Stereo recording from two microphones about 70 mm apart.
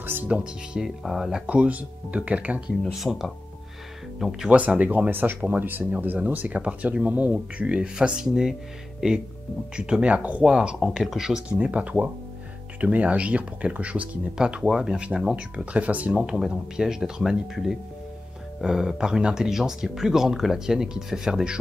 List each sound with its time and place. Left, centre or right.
0.0 s speech: right
0.3 s speech: centre
2.8 s speech: centre
4.5 s speech: right
10.8 s speech: centre
11.5 s speech: centre